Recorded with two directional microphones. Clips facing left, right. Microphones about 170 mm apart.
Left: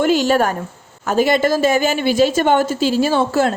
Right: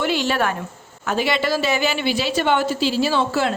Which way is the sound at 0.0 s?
45° left (ahead or behind).